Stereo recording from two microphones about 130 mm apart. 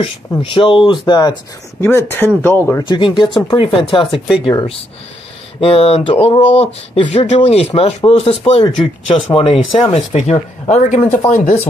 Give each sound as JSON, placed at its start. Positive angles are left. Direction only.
{"t": 0.4, "sound": "speech", "side_deg": 40}
{"t": 1.8, "sound": "speech", "side_deg": 20}
{"t": 2.8, "sound": "speech", "side_deg": 35}
{"t": 5.6, "sound": "speech", "side_deg": 50}
{"t": 9.8, "sound": "speech", "side_deg": 60}